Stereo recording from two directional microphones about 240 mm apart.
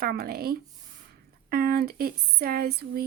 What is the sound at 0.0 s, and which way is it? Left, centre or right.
Speech, right.